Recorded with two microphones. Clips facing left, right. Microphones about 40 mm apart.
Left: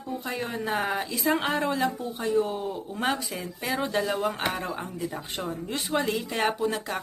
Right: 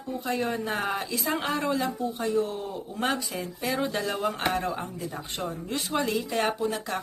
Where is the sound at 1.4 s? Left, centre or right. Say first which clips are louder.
Left 1 dB; centre.